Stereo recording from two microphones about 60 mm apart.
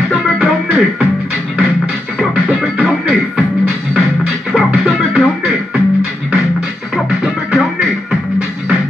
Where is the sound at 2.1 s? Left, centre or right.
Centre.